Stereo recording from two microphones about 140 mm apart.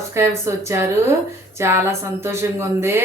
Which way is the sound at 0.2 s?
20° right (ahead or behind).